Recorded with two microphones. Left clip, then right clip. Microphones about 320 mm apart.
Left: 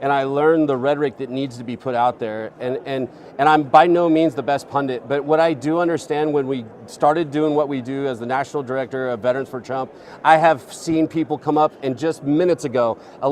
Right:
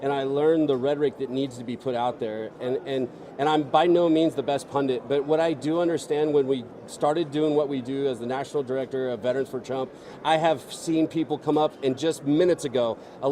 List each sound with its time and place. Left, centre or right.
0.0 s speech: left